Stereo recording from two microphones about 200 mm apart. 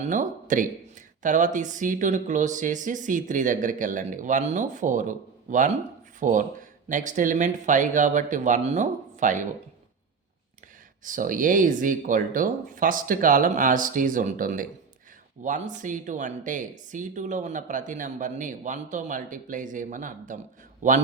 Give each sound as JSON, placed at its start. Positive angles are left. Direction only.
{"t": 0.0, "sound": "speech", "side_deg": -40}
{"t": 11.0, "sound": "speech", "side_deg": -40}